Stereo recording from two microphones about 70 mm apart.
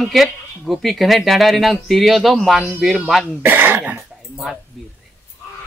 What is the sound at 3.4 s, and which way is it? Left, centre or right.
Speech, right.